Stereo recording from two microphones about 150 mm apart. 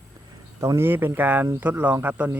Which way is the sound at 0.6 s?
20° right (ahead or behind).